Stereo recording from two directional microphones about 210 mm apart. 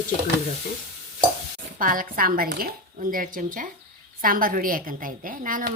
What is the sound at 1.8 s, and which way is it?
A woman's voice, 40° right (ahead or behind).